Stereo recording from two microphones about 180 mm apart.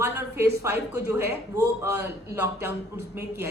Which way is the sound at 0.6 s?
15° right (ahead or behind).